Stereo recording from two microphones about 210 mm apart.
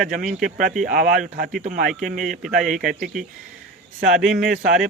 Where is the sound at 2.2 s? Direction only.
Centre (ahead or behind).